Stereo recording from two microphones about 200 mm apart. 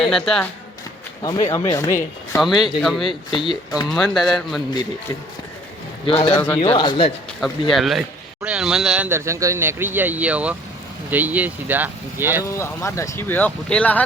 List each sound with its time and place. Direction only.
0.0 s a man's voice: centre (ahead or behind)
1.2 s speech: 15° left (ahead or behind)
2.8 s a man's voice: centre (ahead or behind)
3.1 s speech: 25° left (ahead or behind)
3.8 s a man's voice: centre (ahead or behind)
4.7 s speech: 20° left (ahead or behind)
7.8 s a man's voice: centre (ahead or behind)
12.5 s speech: 15° left (ahead or behind)